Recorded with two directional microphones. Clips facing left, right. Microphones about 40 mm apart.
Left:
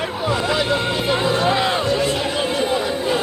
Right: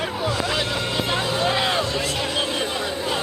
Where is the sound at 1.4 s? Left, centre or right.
Centre.